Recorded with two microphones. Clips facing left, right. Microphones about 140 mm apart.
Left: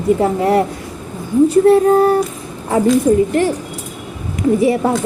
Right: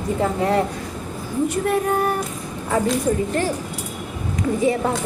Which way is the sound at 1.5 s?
30° left (ahead or behind).